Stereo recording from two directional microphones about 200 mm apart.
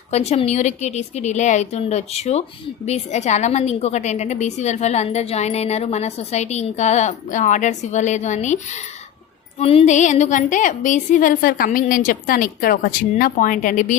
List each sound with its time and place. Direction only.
0.1 s a woman's voice: 30° left (ahead or behind)